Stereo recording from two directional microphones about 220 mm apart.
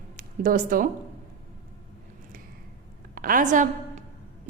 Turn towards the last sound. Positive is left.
turn(degrees=-35)  # may be behind; listen again after turning